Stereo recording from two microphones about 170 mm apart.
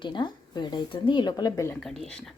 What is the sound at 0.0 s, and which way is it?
Speech, 25° left (ahead or behind).